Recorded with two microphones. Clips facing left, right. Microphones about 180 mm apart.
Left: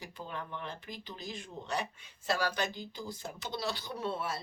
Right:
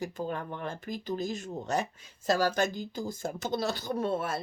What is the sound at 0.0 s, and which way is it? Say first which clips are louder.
Speech: right 8 dB; 45° right (ahead or behind).